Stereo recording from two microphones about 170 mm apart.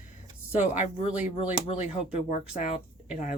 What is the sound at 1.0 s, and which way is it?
Speech, 35° left (ahead or behind).